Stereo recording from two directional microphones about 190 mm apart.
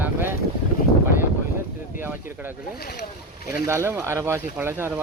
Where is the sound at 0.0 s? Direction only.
10° right (ahead or behind).